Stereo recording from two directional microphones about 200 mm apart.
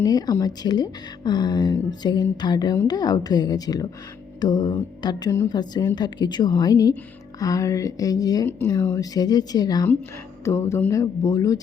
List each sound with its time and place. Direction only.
0.0 s speech: 20° left (ahead or behind)